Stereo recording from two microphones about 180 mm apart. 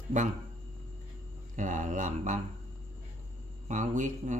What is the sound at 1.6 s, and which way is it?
Speech, 45° right (ahead or behind).